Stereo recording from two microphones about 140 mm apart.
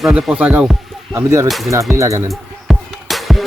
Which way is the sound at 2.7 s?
Centre (ahead or behind).